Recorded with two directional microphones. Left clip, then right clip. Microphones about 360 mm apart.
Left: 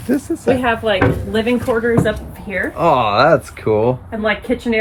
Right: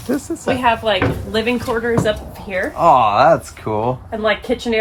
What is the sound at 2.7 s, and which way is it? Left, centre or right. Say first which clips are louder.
Speech: right 2 dB; centre.